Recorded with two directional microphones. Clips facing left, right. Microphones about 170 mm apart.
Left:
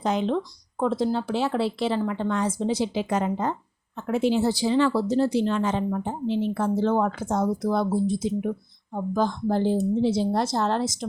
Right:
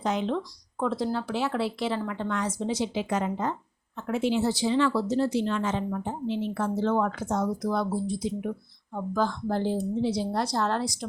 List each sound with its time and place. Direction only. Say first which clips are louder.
0.0 s speech: left 3 dB; 35° left (ahead or behind)